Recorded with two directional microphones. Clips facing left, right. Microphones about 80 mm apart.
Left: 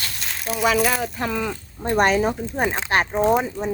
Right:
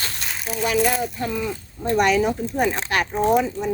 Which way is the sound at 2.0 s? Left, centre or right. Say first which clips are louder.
Even; left.